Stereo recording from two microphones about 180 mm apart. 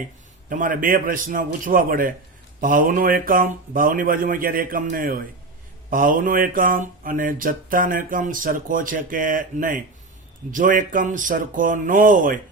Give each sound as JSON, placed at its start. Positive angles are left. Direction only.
{"t": 0.5, "sound": "speech", "side_deg": -50}